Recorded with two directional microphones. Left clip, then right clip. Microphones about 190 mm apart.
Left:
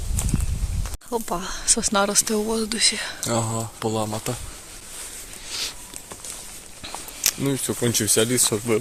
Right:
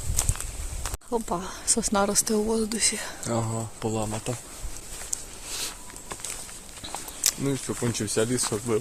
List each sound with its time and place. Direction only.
0.2 s clip-clop: 10° right (ahead or behind)
1.1 s speech: centre (ahead or behind)
3.2 s speech: 40° left (ahead or behind)
5.5 s a sound: 10° right (ahead or behind)
6.8 s a sound: centre (ahead or behind)
7.4 s speech: 55° left (ahead or behind)